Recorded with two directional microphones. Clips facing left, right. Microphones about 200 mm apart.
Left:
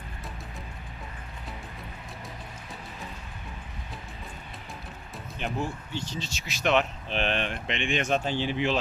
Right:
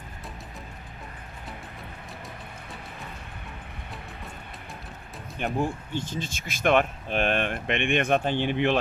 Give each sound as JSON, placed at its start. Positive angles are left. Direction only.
{"t": 5.4, "sound": "speech", "side_deg": -50}